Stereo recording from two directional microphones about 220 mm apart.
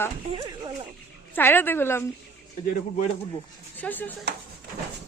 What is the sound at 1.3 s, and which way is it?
Speech, 10° left (ahead or behind).